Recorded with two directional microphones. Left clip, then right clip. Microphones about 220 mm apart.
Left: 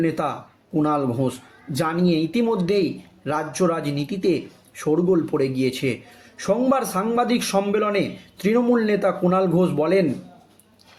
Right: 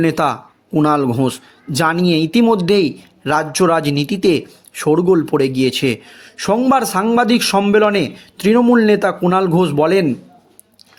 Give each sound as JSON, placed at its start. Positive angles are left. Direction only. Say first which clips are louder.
{"t": 0.0, "sound": "speech", "louder": "right 8 dB", "side_deg": -45}